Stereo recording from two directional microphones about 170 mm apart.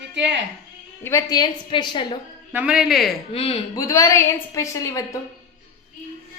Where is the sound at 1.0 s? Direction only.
20° left (ahead or behind).